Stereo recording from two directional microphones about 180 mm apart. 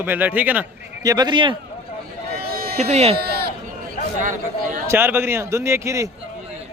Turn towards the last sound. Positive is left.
turn(degrees=-15)  # may be behind; listen again after turning